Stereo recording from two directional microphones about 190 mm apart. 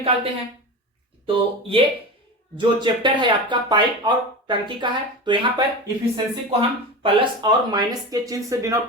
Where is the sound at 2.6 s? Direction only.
25° right (ahead or behind).